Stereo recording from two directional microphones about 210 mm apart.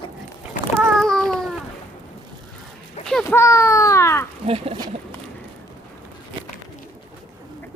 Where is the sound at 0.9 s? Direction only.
Centre (ahead or behind).